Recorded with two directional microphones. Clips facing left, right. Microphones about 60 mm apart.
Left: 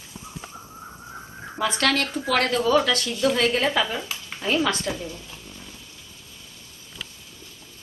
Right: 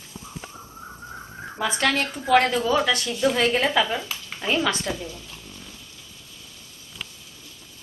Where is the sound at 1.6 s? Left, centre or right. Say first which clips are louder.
Even; centre.